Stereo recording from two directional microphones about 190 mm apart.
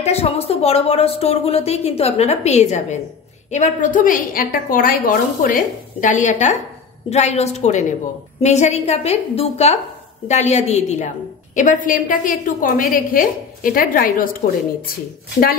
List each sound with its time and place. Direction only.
0.0 s a woman's voice: 35° left (ahead or behind)